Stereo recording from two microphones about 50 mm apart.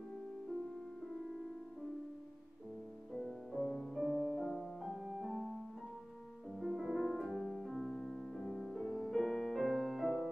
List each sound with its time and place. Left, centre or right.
3.1 s music: centre
3.6 s music: left
3.9 s music: centre
4.9 s music: centre
5.3 s music: centre
7.3 s music: centre